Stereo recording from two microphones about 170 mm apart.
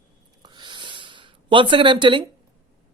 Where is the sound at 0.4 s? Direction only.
25° right (ahead or behind).